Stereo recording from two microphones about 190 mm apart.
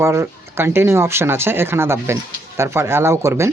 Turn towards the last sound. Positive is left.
turn(degrees=-15)  # may be behind; listen again after turning